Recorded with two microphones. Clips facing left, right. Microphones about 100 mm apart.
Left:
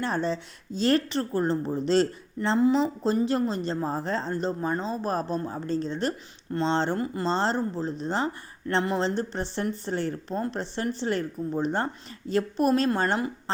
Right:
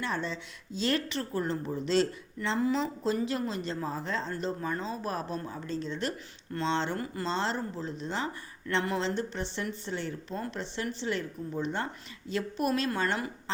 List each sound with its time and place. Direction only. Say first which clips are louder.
0.0 s speech: left 6 dB; 40° left (ahead or behind)